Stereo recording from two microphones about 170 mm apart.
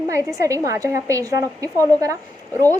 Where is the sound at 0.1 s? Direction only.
20° right (ahead or behind).